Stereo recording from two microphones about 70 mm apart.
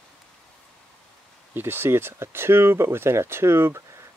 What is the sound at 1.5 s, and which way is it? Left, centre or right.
Speech, right.